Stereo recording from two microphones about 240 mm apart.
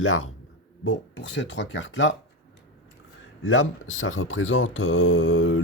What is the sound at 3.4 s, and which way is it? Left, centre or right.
Speech, left.